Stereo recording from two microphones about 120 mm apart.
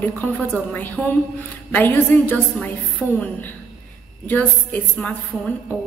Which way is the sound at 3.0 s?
5° left (ahead or behind).